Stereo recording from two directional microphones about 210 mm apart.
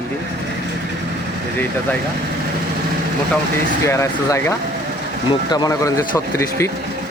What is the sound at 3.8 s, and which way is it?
Speech, 15° left (ahead or behind).